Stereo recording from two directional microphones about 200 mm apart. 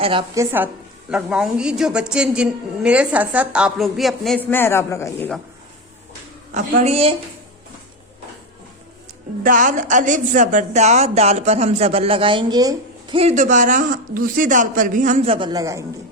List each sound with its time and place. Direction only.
0.0 s a woman's voice: 25° right (ahead or behind)
0.3 s a woman's voice: 10° right (ahead or behind); by 5.3 s 15° left (ahead or behind)
6.5 s speech: 40° right (ahead or behind)
9.4 s speech: 40° right (ahead or behind); by 15.8 s 15° right (ahead or behind)